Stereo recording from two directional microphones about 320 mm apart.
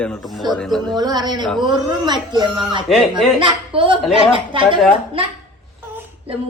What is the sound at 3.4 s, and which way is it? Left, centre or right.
A woman's voice, centre.